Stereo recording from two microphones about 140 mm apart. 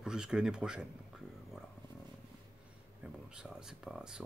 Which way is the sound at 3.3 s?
5° right (ahead or behind).